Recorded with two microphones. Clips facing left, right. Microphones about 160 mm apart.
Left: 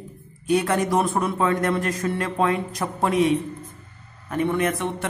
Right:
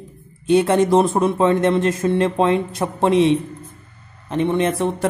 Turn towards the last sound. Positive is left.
turn(degrees=-30)  # may be behind; listen again after turning